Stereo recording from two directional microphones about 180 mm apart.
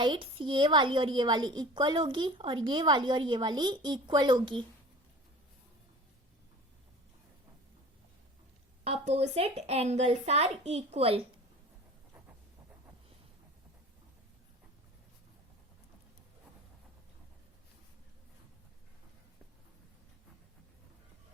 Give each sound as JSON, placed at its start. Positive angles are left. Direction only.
{"t": 0.0, "sound": "a woman's voice", "side_deg": -25}
{"t": 8.8, "sound": "a woman's voice", "side_deg": -35}